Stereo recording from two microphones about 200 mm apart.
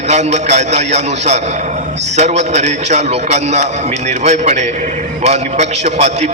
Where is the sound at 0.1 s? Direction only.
35° right (ahead or behind).